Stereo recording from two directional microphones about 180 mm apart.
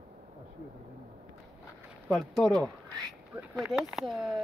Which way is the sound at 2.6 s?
20° right (ahead or behind).